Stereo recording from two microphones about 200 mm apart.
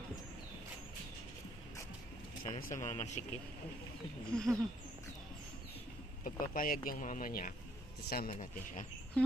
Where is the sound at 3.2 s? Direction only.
30° left (ahead or behind).